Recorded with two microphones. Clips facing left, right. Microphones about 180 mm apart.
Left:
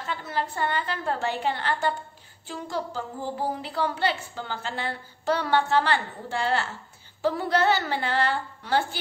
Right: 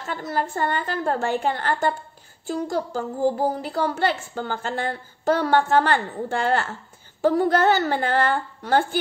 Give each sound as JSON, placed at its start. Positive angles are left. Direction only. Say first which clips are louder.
{"t": 0.0, "sound": "a woman's voice", "louder": "right 4 dB", "side_deg": -45}